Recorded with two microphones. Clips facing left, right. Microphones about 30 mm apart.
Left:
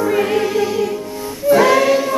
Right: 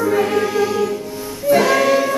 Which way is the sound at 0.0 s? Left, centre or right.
Centre.